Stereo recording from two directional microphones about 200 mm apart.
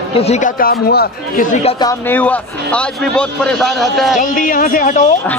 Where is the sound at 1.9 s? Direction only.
10° left (ahead or behind).